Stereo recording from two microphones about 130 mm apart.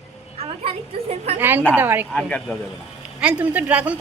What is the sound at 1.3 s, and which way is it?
Speech, 15° right (ahead or behind).